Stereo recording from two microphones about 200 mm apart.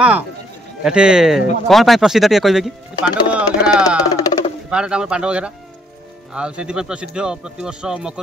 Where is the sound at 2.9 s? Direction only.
20° left (ahead or behind).